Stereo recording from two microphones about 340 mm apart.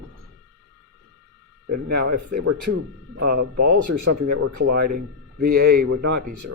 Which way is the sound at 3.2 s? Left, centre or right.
Right.